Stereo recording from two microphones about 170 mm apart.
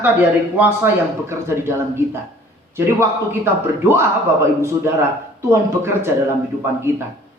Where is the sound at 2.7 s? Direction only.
15° right (ahead or behind).